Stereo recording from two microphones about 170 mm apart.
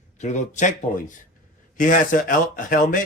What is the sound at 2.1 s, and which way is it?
Speech, 55° left (ahead or behind).